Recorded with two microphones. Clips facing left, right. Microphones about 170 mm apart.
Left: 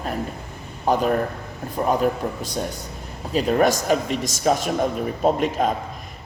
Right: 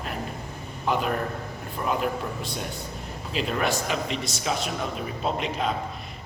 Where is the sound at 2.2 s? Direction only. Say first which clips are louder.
Left 6 dB; 30° left (ahead or behind).